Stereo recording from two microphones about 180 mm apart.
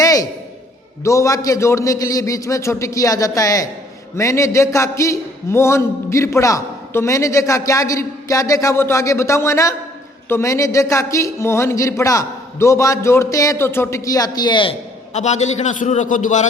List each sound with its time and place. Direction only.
0.0 s a sound: 20° left (ahead or behind)
1.0 s a man's voice: 15° left (ahead or behind)
15.1 s a man's voice: 40° left (ahead or behind)